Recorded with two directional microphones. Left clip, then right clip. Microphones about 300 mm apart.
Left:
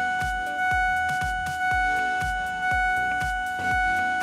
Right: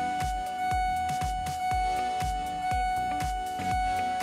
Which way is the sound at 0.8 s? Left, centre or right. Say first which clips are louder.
Left 5 dB; right.